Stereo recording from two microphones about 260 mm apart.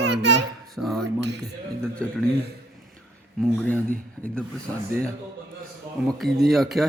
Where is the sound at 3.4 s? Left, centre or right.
Centre.